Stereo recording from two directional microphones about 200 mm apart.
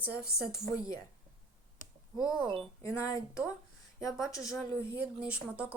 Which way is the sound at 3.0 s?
15° left (ahead or behind).